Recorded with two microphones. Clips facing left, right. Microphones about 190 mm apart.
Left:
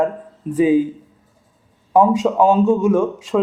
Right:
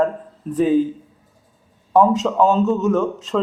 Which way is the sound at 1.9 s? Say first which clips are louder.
Left 1 dB; 10° left (ahead or behind).